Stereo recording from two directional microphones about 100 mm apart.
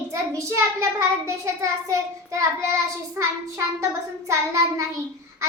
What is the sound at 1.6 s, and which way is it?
Speech, 30° right (ahead or behind).